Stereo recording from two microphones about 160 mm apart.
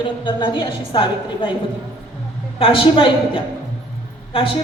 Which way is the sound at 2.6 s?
35° left (ahead or behind).